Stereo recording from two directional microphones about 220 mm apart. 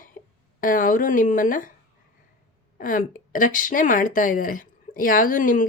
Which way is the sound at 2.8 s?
35° left (ahead or behind).